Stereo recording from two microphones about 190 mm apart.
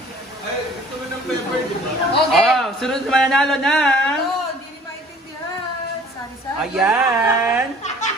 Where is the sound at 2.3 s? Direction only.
Centre (ahead or behind).